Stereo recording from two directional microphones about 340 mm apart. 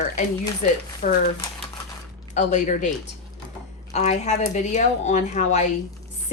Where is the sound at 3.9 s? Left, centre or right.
Centre.